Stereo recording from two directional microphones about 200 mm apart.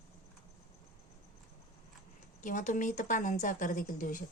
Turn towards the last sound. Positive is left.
turn(degrees=40)  # may be behind; listen again after turning